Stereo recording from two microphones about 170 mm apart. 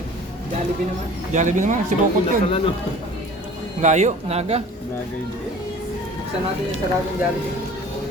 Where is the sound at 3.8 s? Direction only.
45° right (ahead or behind).